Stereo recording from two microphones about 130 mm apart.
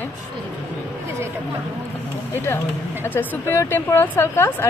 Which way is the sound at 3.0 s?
15° left (ahead or behind).